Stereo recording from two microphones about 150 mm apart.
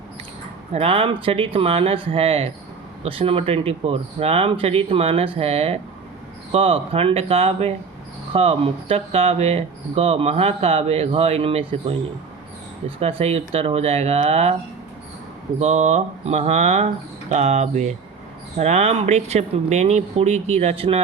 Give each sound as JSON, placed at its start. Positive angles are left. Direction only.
{"t": 0.7, "sound": "speech", "side_deg": -40}
{"t": 13.0, "sound": "speech", "side_deg": -40}
{"t": 15.6, "sound": "speech", "side_deg": -50}